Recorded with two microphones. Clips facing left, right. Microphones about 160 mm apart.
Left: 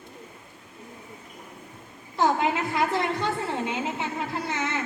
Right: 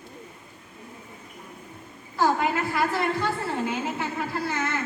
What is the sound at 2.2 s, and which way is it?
A woman's voice, 20° left (ahead or behind).